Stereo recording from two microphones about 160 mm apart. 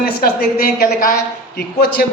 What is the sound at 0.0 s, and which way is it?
A woman's voice, 75° left (ahead or behind).